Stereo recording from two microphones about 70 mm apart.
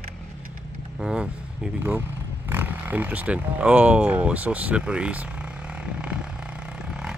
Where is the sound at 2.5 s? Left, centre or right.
Right.